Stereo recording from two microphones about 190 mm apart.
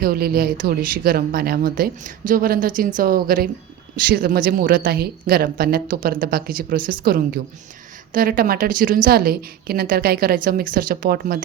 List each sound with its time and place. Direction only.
0.0 s a woman's voice: 50° right (ahead or behind)